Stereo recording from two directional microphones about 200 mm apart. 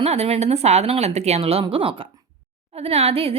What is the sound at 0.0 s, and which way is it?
A woman's voice, 30° right (ahead or behind).